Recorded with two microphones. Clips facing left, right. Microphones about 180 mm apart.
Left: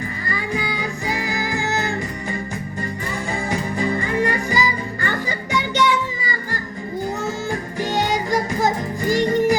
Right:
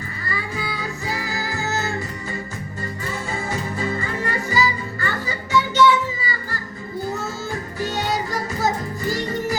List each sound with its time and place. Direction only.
0.3 s music: 15° left (ahead or behind)
3.5 s music: 15° left (ahead or behind)
7.8 s music: 15° left (ahead or behind)